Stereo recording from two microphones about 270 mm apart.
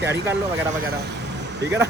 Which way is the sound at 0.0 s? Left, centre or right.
Centre.